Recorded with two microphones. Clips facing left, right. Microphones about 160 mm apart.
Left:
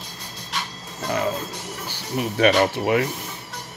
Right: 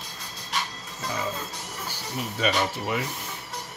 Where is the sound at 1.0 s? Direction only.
70° left (ahead or behind).